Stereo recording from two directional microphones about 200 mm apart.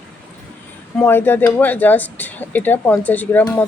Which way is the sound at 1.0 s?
10° left (ahead or behind).